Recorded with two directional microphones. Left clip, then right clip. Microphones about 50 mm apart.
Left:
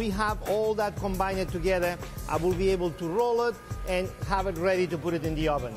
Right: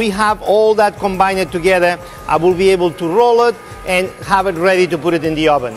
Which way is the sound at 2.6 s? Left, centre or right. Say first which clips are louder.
Right 14 dB; right.